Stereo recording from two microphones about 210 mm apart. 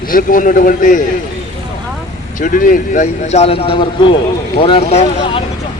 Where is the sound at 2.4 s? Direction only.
40° left (ahead or behind).